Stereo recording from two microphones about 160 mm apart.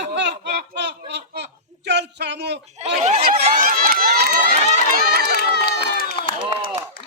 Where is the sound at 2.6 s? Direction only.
45° right (ahead or behind).